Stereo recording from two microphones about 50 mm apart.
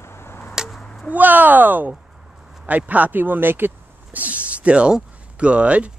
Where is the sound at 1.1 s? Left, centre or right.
Right.